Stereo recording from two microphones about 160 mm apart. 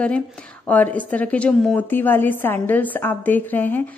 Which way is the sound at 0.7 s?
10° left (ahead or behind).